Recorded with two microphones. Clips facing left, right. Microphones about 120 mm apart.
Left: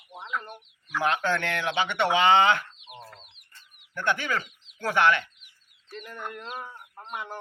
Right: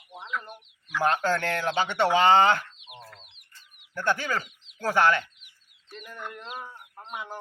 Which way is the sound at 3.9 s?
35° right (ahead or behind).